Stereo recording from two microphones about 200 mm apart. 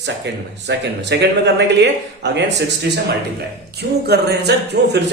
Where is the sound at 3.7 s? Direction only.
55° right (ahead or behind).